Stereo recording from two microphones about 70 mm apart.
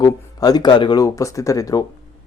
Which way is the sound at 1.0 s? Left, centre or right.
Left.